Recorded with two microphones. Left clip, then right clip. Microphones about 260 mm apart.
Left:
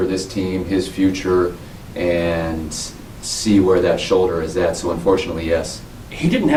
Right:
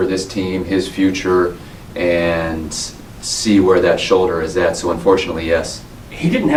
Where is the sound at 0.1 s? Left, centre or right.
Centre.